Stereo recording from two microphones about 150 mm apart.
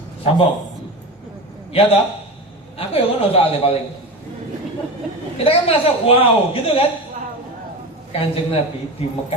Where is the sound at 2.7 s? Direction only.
40° left (ahead or behind).